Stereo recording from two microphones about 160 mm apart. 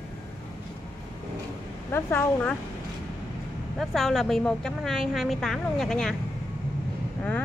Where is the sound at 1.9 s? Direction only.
15° left (ahead or behind).